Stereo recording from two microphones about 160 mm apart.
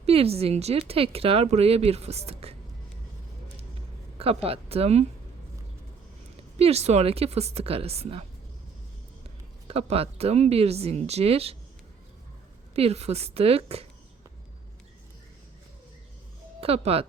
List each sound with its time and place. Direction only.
0.0 s speech: 40° right (ahead or behind)
4.4 s speech: 40° right (ahead or behind)
6.6 s speech: 40° right (ahead or behind)
9.6 s speech: 40° right (ahead or behind)
12.7 s speech: 40° right (ahead or behind)
16.6 s speech: 40° right (ahead or behind)